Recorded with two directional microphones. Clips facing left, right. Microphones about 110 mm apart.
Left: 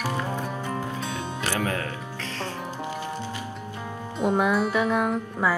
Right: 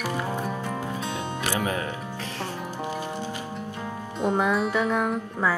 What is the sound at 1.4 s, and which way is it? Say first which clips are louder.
Music: even; 15° right (ahead or behind).